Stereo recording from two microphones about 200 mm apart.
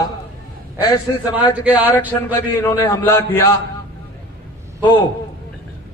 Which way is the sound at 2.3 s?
15° left (ahead or behind).